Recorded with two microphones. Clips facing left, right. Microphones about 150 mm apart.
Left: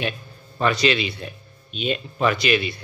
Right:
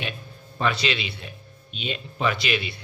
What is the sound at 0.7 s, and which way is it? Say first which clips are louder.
Speech: left 5 dB; 45° left (ahead or behind).